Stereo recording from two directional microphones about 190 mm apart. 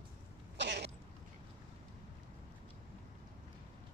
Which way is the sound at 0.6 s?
60° right (ahead or behind).